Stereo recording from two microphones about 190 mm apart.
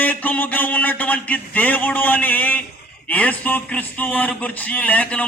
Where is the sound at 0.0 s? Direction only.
10° left (ahead or behind).